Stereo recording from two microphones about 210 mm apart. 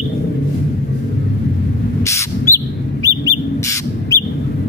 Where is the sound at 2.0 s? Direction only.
15° left (ahead or behind).